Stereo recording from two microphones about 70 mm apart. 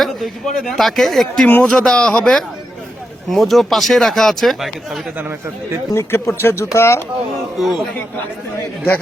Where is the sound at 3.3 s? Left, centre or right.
Centre.